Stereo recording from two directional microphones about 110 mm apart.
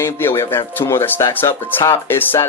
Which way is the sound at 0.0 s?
20° left (ahead or behind).